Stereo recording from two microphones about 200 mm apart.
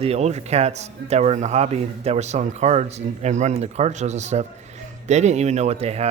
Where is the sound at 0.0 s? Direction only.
30° right (ahead or behind).